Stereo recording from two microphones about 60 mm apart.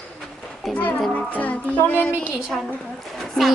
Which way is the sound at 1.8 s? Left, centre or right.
Left.